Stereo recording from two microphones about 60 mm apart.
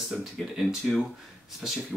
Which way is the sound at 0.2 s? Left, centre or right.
Centre.